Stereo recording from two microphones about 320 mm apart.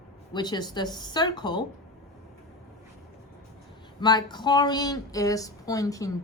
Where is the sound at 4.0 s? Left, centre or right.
Centre.